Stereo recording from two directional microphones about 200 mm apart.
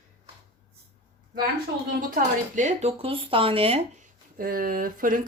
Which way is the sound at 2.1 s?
35° right (ahead or behind).